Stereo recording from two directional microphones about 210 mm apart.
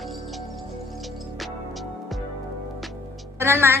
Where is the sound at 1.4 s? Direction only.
Centre (ahead or behind).